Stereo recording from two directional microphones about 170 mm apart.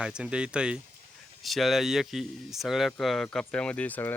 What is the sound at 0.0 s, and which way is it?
Speech, 5° right (ahead or behind).